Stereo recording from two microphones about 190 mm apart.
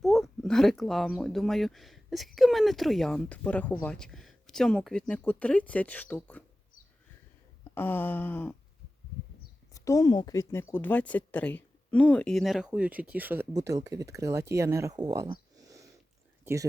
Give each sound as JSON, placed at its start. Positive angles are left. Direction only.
{"t": 0.0, "sound": "speech", "side_deg": 0}
{"t": 7.6, "sound": "a sound", "side_deg": 10}
{"t": 9.7, "sound": "speech", "side_deg": 15}